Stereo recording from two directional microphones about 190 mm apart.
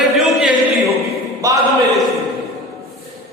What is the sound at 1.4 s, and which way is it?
Speech, 15° right (ahead or behind).